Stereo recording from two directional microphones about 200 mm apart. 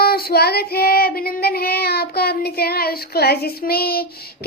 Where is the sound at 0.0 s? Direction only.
50° left (ahead or behind).